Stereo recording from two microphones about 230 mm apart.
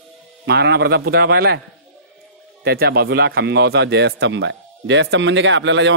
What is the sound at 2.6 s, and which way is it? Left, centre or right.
Speech, right.